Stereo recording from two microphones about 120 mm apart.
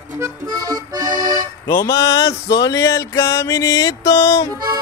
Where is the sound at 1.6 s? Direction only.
25° left (ahead or behind).